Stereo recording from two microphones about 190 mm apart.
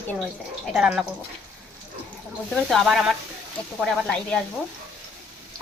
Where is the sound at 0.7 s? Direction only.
5° right (ahead or behind).